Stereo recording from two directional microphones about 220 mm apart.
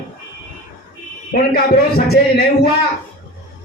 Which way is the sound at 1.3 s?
45° left (ahead or behind).